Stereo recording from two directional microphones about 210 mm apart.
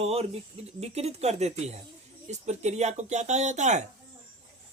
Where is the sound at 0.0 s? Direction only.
30° right (ahead or behind).